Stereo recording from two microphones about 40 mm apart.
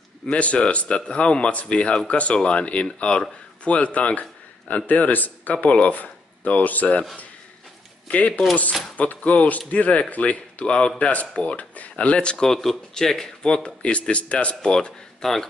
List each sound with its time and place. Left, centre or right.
0.3 s a man's voice: left
8.1 s speech: left
12.9 s a man's voice: centre; by 14.6 s left
14.6 s a man's voice: centre
15.2 s speech: centre